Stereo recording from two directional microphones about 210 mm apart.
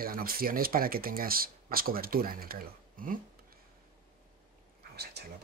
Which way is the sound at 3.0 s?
40° right (ahead or behind).